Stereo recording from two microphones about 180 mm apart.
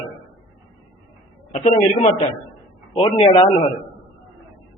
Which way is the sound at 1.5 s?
35° left (ahead or behind).